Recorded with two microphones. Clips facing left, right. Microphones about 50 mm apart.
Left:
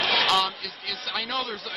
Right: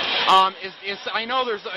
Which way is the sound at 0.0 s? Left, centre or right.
Right.